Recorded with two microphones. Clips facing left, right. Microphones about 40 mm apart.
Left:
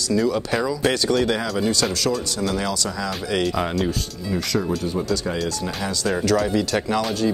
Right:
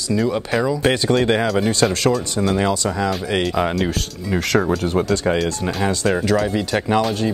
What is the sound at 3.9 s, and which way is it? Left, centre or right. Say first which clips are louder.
Speech: right 2 dB; right.